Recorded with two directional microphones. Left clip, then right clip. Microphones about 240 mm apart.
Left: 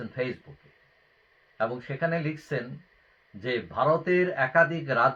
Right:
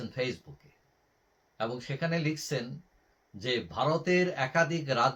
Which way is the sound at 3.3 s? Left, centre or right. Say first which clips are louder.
Left 3 dB; centre.